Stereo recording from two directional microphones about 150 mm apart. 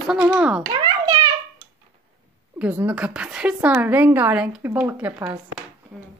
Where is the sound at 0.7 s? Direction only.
30° right (ahead or behind).